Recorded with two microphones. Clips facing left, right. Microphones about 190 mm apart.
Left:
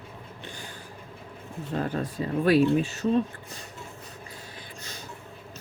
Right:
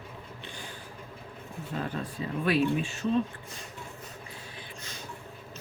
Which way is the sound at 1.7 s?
40° left (ahead or behind).